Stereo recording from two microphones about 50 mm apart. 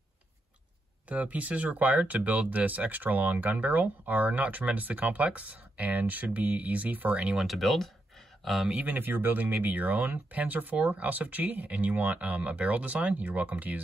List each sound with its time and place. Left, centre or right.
1.0 s speech: right
7.4 s speech: centre
8.7 s speech: right